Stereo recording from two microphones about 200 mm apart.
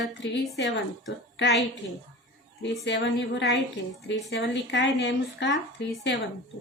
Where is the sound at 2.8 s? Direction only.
60° left (ahead or behind).